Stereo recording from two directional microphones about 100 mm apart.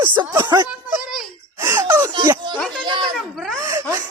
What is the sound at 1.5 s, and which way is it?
Speech, 25° right (ahead or behind).